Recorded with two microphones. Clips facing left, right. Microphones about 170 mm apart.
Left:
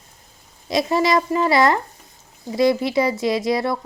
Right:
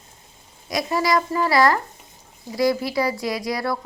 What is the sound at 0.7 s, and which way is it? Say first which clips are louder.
A woman's voice: left 3 dB; 25° left (ahead or behind).